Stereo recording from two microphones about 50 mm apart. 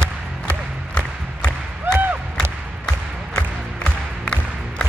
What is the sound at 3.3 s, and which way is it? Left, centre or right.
Music, left.